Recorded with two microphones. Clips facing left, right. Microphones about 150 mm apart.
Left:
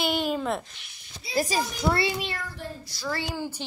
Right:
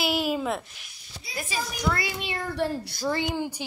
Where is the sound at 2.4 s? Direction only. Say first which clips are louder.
Right 9 dB; 70° right (ahead or behind).